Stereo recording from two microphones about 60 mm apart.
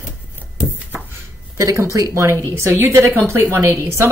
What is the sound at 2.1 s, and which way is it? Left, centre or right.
A woman's voice, right.